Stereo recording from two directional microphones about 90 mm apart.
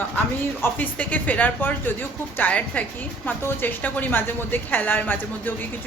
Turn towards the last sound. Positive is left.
turn(degrees=20)  # may be behind; listen again after turning